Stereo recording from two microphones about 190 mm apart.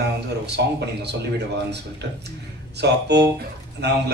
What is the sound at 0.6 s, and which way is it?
Speech, 60° right (ahead or behind).